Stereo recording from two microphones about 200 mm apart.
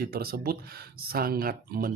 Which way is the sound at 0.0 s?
50° right (ahead or behind).